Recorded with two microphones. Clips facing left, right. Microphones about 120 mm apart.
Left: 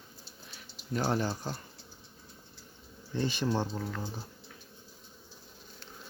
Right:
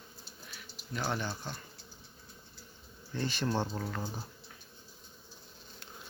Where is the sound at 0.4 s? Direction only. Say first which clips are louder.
Left 4 dB; 35° left (ahead or behind).